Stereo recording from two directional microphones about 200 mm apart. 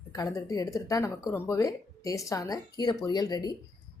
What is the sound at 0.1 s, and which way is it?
Speech, 15° left (ahead or behind).